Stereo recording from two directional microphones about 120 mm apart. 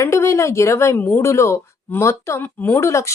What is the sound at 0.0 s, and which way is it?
Speech, 25° left (ahead or behind).